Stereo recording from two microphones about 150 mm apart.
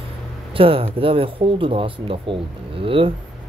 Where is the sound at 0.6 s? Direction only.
40° right (ahead or behind).